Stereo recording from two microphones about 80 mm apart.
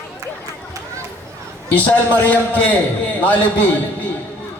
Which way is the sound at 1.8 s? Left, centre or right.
Left.